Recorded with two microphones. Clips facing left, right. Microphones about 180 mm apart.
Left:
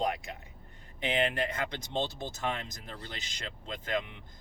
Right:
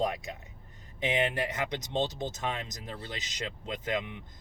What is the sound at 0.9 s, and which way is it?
Speech, 20° right (ahead or behind).